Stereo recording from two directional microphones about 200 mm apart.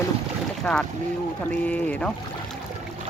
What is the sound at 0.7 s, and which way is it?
Speech, 5° left (ahead or behind).